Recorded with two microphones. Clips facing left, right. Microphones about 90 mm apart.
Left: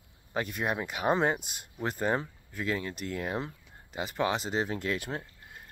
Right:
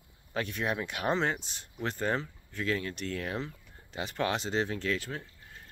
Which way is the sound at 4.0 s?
5° left (ahead or behind).